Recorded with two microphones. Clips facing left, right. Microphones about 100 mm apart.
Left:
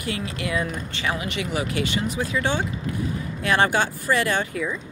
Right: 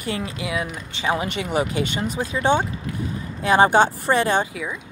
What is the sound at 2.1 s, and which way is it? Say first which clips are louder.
Speech: right 7 dB; 20° right (ahead or behind).